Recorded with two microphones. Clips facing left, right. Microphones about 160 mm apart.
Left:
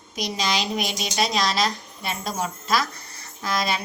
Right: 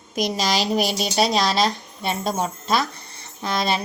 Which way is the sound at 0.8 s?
5° right (ahead or behind).